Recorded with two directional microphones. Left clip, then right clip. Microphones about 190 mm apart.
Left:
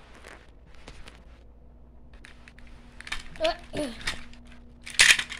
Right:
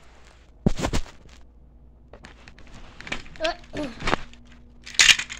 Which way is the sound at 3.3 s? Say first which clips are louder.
Even; 10° left (ahead or behind).